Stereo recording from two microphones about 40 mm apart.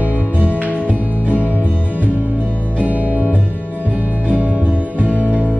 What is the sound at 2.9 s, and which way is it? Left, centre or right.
Music, right.